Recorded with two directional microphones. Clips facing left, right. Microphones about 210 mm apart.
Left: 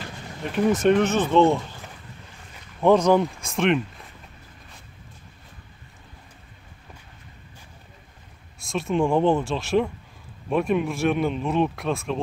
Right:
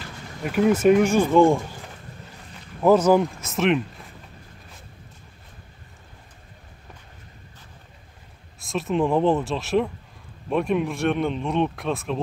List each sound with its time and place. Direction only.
0.4 s speech: 5° right (ahead or behind)
2.8 s speech: 5° right (ahead or behind)
8.6 s speech: centre (ahead or behind)